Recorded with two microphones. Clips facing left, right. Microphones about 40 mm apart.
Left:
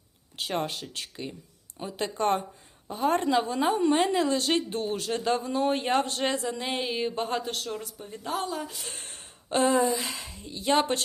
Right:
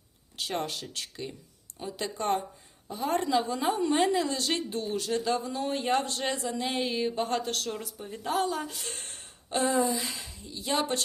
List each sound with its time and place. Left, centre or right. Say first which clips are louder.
0.4 s speech: left 2 dB; left
2.1 s a woman's voice: left 3 dB; left
6.7 s speech: right 1 dB; left
7.3 s speech: even; centre
9.1 s speech: left 5 dB; left